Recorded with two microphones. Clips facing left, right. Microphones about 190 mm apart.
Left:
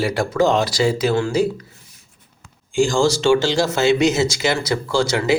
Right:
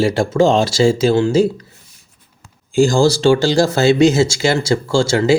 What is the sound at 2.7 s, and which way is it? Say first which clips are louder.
Speech: right 4 dB; 35° right (ahead or behind).